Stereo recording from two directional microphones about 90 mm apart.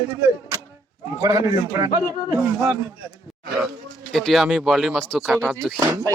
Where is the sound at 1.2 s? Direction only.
35° right (ahead or behind).